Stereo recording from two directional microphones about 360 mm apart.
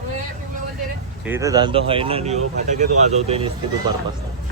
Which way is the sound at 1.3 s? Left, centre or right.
Centre.